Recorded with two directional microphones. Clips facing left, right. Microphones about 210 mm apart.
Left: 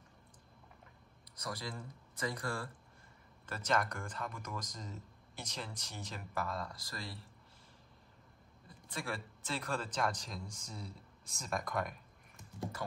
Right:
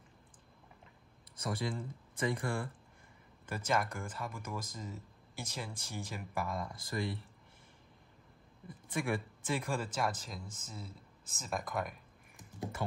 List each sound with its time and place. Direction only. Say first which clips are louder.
1.4 s speech: right 6 dB; 25° right (ahead or behind)
3.4 s speech: right 1 dB; 10° right (ahead or behind)
9.0 s speech: right 6 dB; 15° right (ahead or behind)